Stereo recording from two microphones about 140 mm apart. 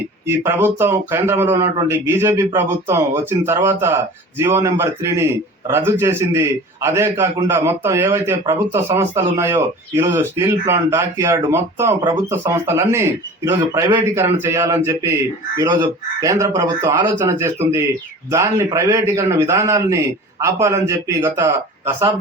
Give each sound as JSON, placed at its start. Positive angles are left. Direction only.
{"t": 0.3, "sound": "speech", "side_deg": -20}